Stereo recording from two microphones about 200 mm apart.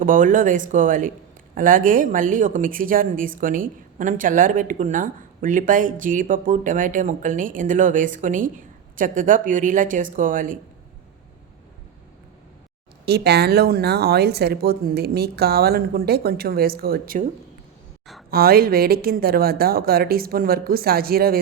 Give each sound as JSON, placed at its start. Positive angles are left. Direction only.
{"t": 0.0, "sound": "a woman's voice", "side_deg": -40}
{"t": 13.1, "sound": "speech", "side_deg": -55}
{"t": 18.3, "sound": "speech", "side_deg": -50}